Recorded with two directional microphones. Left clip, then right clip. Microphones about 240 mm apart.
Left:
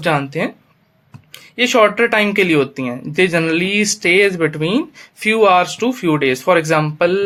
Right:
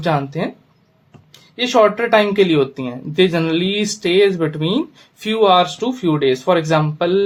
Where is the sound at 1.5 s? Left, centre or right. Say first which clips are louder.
Left 1 dB; left.